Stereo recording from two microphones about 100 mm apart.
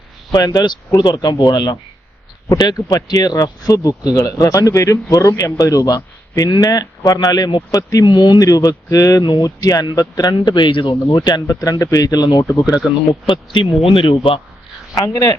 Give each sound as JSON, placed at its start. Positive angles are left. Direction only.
{"t": 0.3, "sound": "speech", "side_deg": 40}
{"t": 8.0, "sound": "speech", "side_deg": 50}
{"t": 9.2, "sound": "speech", "side_deg": 45}
{"t": 10.3, "sound": "speech", "side_deg": 50}
{"t": 13.2, "sound": "a man's voice", "side_deg": 55}
{"t": 14.9, "sound": "speech", "side_deg": 35}